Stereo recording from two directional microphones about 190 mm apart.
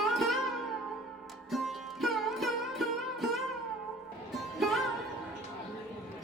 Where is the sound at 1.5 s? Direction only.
Centre (ahead or behind).